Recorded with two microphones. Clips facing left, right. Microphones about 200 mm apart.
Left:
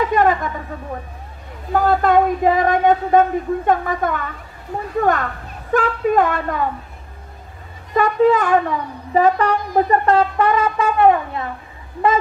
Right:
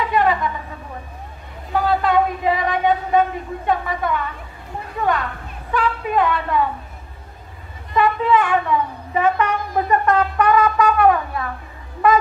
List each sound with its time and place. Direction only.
0.0 s a sound: 45° left (ahead or behind)
1.7 s a woman's voice: 45° left (ahead or behind)
7.9 s a woman's voice: 45° left (ahead or behind); by 11.4 s 25° left (ahead or behind)